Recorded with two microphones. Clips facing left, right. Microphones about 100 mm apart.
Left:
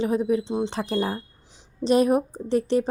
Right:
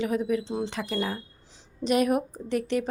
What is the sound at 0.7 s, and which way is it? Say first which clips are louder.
A woman's voice: left 4 dB; 35° left (ahead or behind).